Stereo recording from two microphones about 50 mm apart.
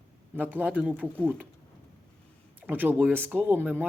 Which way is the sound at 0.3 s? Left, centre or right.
Right.